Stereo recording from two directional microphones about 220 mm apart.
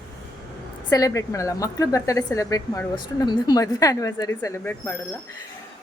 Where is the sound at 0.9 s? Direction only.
15° left (ahead or behind).